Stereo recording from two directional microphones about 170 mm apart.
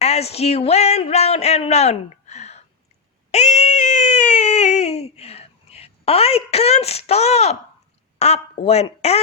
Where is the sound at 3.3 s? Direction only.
40° left (ahead or behind).